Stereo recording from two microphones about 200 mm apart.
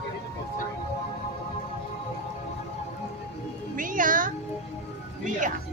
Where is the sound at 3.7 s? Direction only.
40° right (ahead or behind).